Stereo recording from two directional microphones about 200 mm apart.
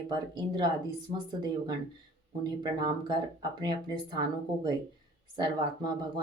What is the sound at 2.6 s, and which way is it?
Speech, 20° right (ahead or behind).